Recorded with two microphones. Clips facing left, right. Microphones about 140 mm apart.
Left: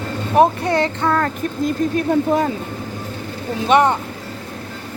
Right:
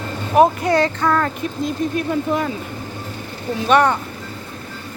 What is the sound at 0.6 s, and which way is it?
Child singing, 25° left (ahead or behind).